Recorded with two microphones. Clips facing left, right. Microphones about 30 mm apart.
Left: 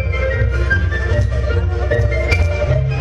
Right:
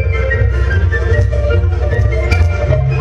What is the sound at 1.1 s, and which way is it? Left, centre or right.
Music, centre.